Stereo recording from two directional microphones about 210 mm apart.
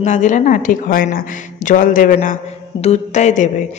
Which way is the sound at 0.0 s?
35° left (ahead or behind).